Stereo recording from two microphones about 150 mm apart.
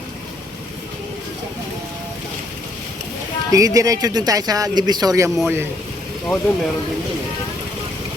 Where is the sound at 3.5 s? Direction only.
20° right (ahead or behind).